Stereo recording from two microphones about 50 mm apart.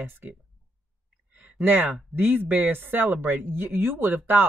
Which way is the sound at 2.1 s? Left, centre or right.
Right.